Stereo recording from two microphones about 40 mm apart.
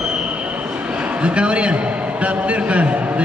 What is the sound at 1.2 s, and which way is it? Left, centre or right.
A man's voice, right.